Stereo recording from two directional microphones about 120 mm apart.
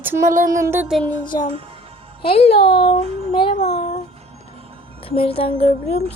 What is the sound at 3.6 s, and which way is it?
Speech, 70° left (ahead or behind).